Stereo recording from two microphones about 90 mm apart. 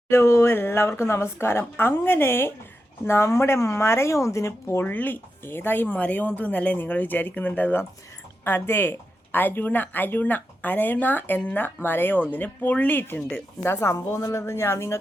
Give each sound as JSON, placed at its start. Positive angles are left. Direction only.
{"t": 0.1, "sound": "speech", "side_deg": 30}